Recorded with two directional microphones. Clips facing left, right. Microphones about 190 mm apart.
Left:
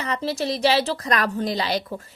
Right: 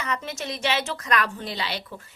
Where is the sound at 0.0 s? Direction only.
35° left (ahead or behind).